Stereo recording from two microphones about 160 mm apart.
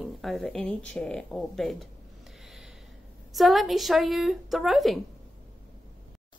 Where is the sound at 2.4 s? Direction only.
Centre (ahead or behind).